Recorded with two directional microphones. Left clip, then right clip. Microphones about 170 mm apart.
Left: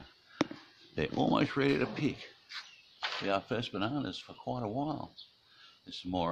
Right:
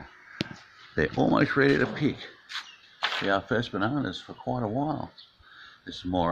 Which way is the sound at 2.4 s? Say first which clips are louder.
Right 9 dB; 65° right (ahead or behind).